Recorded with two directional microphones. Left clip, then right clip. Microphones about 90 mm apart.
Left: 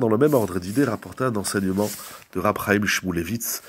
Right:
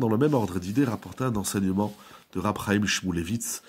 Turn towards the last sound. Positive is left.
turn(degrees=-30)  # may be behind; listen again after turning